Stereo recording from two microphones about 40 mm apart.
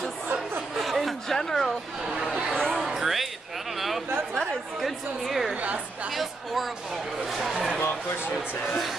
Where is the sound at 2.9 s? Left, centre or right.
Centre.